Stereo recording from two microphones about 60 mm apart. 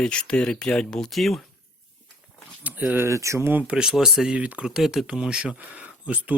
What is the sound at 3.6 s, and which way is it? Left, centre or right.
Speech, centre.